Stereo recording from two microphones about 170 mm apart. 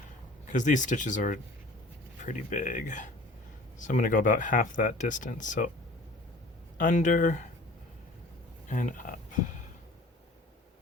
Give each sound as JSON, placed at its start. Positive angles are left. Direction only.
{"t": 0.4, "sound": "speech", "side_deg": 45}
{"t": 6.7, "sound": "speech", "side_deg": 50}
{"t": 8.6, "sound": "speech", "side_deg": 50}